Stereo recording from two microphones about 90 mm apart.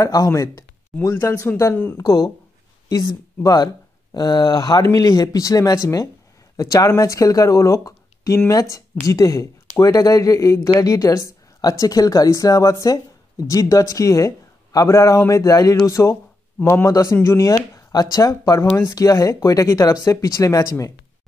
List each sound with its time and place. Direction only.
0.0 s speech: 40° left (ahead or behind)
2.0 s speech: 45° left (ahead or behind)
15.9 s speech: 30° left (ahead or behind)